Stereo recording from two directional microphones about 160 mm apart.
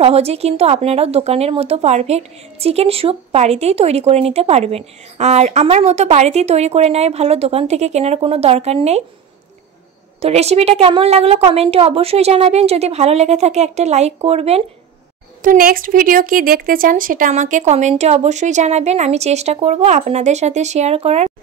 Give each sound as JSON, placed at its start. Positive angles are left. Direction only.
{"t": 0.0, "sound": "speech", "side_deg": -40}
{"t": 10.2, "sound": "speech", "side_deg": -40}
{"t": 15.4, "sound": "speech", "side_deg": -60}